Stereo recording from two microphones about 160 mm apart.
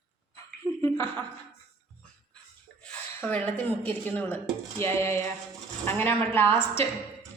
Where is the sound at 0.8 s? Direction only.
15° left (ahead or behind).